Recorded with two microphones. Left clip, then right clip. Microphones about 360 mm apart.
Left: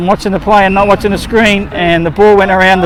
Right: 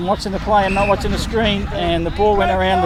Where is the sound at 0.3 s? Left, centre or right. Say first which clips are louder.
Left 8 dB; left.